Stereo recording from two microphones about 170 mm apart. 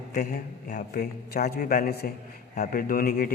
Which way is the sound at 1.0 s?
65° left (ahead or behind).